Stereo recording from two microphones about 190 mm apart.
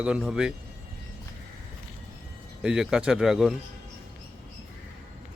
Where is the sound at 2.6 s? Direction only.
5° right (ahead or behind).